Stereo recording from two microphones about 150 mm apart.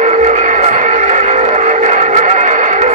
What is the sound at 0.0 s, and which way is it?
Music, 50° right (ahead or behind).